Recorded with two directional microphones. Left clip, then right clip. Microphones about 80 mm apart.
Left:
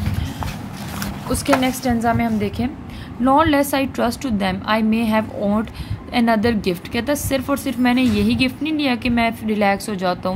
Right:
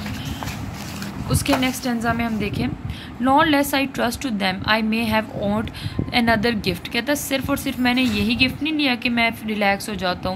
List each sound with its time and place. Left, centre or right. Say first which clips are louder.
1.3 s a woman's voice: left 3 dB; left